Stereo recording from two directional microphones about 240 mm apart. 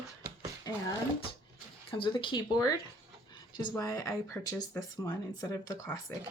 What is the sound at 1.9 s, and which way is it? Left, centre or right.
Speech, left.